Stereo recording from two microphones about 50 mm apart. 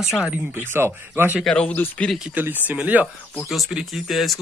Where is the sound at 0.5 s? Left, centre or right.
Right.